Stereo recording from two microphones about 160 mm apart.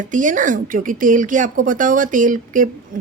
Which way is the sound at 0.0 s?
55° right (ahead or behind).